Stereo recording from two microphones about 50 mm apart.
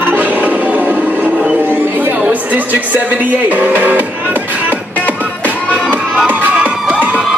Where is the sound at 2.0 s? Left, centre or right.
Right.